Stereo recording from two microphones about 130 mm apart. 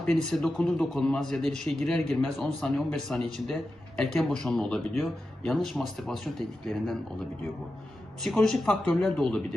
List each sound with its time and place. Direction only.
0.0 s a man's voice: 5° left (ahead or behind)
8.2 s a man's voice: 5° left (ahead or behind)